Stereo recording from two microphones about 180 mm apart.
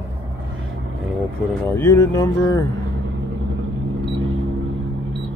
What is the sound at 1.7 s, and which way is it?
Speech, 10° left (ahead or behind).